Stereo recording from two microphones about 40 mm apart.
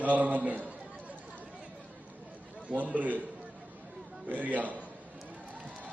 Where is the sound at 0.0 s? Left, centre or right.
Right.